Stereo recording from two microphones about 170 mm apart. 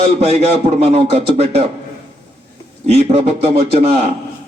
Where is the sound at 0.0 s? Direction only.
40° right (ahead or behind).